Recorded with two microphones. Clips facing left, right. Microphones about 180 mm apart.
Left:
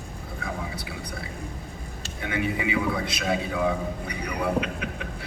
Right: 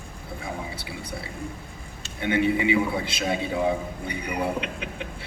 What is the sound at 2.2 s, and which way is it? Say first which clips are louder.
A man's voice: right 5 dB; 30° right (ahead or behind).